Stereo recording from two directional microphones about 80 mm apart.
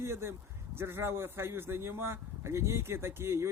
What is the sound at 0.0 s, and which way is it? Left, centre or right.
A man's voice, right.